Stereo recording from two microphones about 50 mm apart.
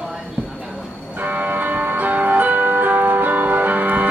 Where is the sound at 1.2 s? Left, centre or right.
Right.